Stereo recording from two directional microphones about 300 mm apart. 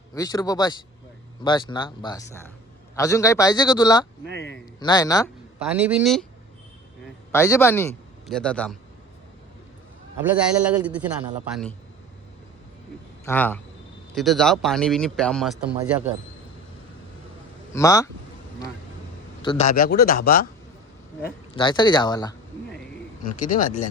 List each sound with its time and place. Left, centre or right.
0.1 s a man's voice: centre
4.4 s a man's voice: left
4.8 s a man's voice: centre
5.5 s speech: centre
7.3 s a man's voice: centre
10.2 s speech: centre
13.2 s speech: centre
17.7 s a man's voice: centre
19.4 s a man's voice: centre
21.5 s a man's voice: centre
23.2 s a man's voice: left